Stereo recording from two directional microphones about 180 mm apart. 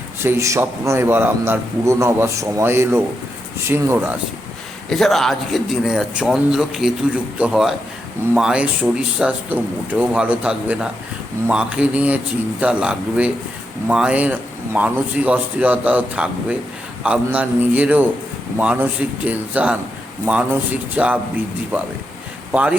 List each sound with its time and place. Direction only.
0.2 s a man's voice: 15° right (ahead or behind)
4.9 s a man's voice: centre (ahead or behind)
20.9 s a man's voice: 10° right (ahead or behind)
22.5 s a man's voice: 5° right (ahead or behind)